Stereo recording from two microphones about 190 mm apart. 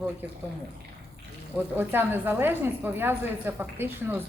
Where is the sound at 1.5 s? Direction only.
10° right (ahead or behind).